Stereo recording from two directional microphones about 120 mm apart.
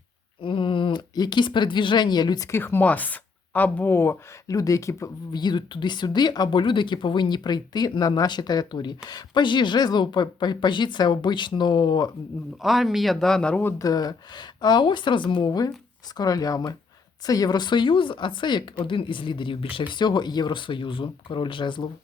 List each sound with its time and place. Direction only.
0.4 s speech: 45° left (ahead or behind)
2.5 s speech: 20° left (ahead or behind); by 12.1 s 35° left (ahead or behind)
12.6 s speech: centre (ahead or behind)
13.7 s speech: 30° left (ahead or behind)